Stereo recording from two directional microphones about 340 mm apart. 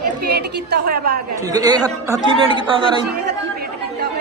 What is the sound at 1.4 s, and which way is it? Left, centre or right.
A man's voice, centre.